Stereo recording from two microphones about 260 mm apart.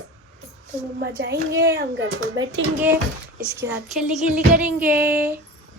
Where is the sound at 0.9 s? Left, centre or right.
Right.